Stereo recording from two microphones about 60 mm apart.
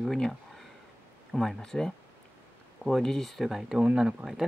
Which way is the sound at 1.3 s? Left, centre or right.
Centre.